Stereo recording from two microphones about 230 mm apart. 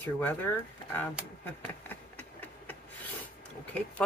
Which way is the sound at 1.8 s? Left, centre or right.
Centre.